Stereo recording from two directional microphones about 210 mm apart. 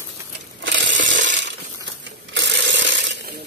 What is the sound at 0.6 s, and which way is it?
Crushing, 60° right (ahead or behind).